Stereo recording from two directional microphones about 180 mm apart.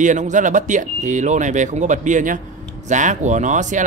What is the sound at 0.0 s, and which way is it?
Speech, 45° right (ahead or behind).